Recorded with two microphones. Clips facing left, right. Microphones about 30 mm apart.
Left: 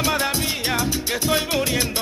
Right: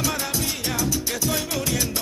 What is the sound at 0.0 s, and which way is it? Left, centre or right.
Music, left.